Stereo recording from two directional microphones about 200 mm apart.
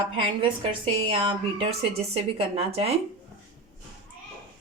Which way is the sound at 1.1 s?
25° right (ahead or behind).